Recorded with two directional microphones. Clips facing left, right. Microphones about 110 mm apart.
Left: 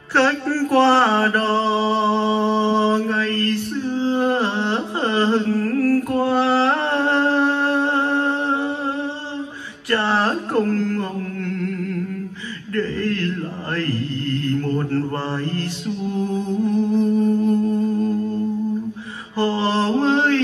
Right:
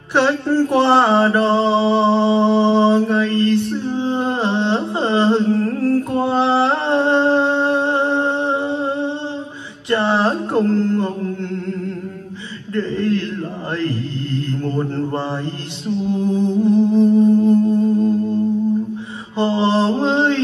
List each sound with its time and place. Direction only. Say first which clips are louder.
0.1 s male singing: right 2 dB; 20° right (ahead or behind)
9.8 s mantra: right 3 dB; 20° right (ahead or behind)
12.7 s a sound: right 3 dB; 20° right (ahead or behind)
13.8 s mantra: right 1 dB; 20° right (ahead or behind)
16.7 s music: right 5 dB; 20° right (ahead or behind)
19.3 s mantra: right 3 dB; 20° right (ahead or behind)